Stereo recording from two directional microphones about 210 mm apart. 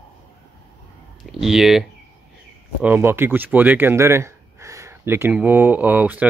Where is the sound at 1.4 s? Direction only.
Centre (ahead or behind).